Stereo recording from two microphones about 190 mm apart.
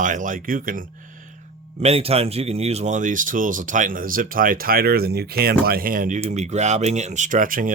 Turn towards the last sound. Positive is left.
turn(degrees=-45)  # may be behind; listen again after turning